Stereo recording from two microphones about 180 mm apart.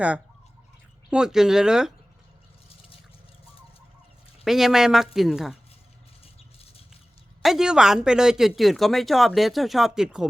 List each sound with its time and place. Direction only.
1.1 s speech: 5° right (ahead or behind)
4.4 s speech: centre (ahead or behind)
6.2 s rattle: 35° left (ahead or behind)
7.4 s speech: 5° right (ahead or behind)